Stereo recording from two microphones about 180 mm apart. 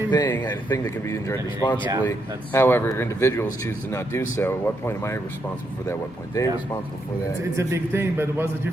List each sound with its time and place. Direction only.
0.1 s speech: 20° left (ahead or behind)
7.5 s a man's voice: 15° right (ahead or behind)